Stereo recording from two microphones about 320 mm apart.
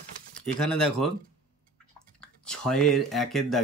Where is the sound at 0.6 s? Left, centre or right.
Centre.